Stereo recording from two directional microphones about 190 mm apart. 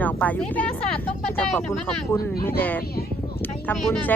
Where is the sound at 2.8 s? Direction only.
55° left (ahead or behind).